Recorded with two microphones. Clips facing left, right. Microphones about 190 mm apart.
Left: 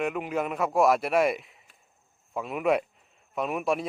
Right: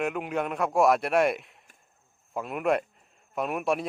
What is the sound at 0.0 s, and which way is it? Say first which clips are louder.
Speech: even; centre (ahead or behind).